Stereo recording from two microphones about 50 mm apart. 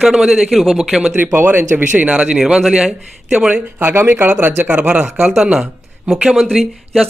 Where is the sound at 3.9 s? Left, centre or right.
Right.